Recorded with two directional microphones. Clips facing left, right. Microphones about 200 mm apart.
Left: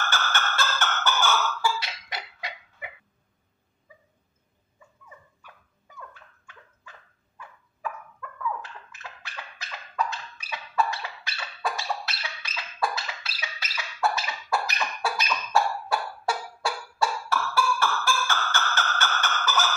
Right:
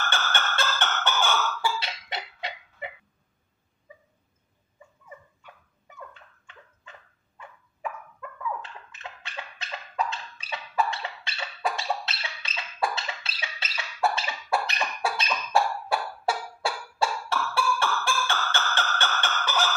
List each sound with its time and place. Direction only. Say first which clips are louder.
0.1 s a sound: even; 25° right (ahead or behind)
6.1 s dog: even; 25° right (ahead or behind)
8.9 s dog: right 5 dB; 25° right (ahead or behind)
14.1 s cough: right 1 dB; 25° right (ahead or behind)